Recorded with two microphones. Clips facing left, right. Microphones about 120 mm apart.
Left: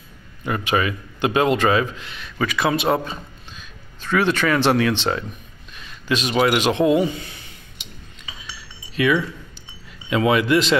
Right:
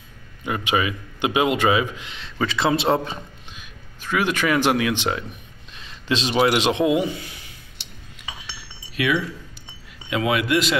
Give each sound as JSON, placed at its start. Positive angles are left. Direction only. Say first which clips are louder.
{"t": 0.4, "sound": "a man's voice", "louder": "left 1 dB", "side_deg": -15}
{"t": 3.5, "sound": "speech", "louder": "left 1 dB", "side_deg": -10}
{"t": 5.8, "sound": "a man's voice", "louder": "left 1 dB", "side_deg": -25}
{"t": 10.0, "sound": "a man's voice", "louder": "left 4 dB", "side_deg": -5}